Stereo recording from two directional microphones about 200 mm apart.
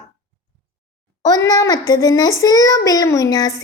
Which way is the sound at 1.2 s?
15° left (ahead or behind).